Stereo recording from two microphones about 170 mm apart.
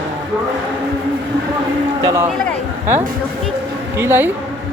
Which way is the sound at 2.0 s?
20° right (ahead or behind).